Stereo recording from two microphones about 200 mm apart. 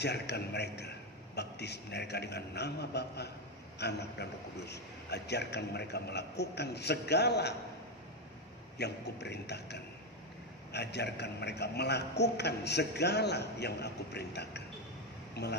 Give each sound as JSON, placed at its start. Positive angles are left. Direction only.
{"t": 0.0, "sound": "a man's voice", "side_deg": 55}
{"t": 8.7, "sound": "a man's voice", "side_deg": 55}